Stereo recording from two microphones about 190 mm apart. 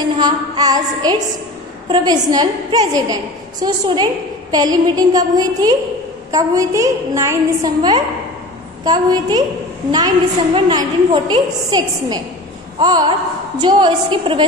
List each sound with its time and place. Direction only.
0.2 s a woman's voice: 20° right (ahead or behind)
12.7 s a sound: 20° right (ahead or behind)
13.6 s a woman's voice: 25° right (ahead or behind)